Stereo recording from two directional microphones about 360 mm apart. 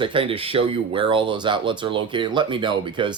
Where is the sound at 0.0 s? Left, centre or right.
Centre.